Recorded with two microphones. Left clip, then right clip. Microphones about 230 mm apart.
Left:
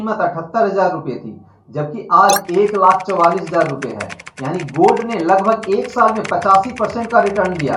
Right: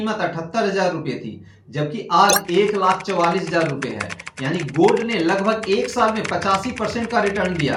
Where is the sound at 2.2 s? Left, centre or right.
Centre.